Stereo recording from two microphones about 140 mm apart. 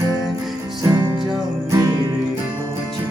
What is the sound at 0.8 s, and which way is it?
Music, 30° right (ahead or behind).